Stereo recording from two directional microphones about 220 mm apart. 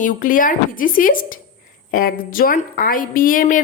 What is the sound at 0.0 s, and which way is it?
A woman's voice, 40° left (ahead or behind).